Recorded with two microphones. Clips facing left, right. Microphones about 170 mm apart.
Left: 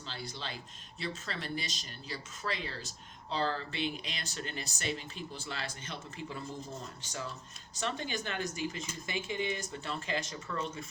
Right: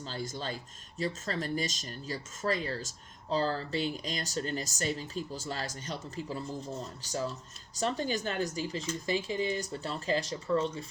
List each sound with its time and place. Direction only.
0.0 s speech: 45° right (ahead or behind)